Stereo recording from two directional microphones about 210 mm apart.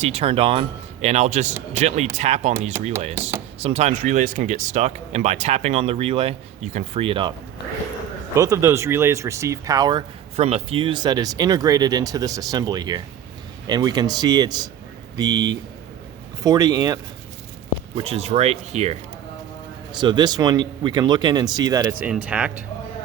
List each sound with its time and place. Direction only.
0.0 s speech: 30° right (ahead or behind)
3.6 s speech: 30° right (ahead or behind)
8.4 s speech: 15° right (ahead or behind)
17.9 s speech: 30° right (ahead or behind)
22.1 s speech: 5° right (ahead or behind)